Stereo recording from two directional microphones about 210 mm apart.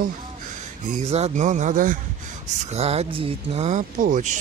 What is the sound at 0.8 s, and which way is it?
Speech, 30° right (ahead or behind).